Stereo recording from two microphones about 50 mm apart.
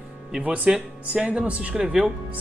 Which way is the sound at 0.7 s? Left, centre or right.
Centre.